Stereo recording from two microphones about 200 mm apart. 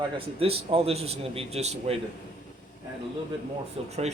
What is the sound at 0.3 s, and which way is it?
A man's voice, 30° right (ahead or behind).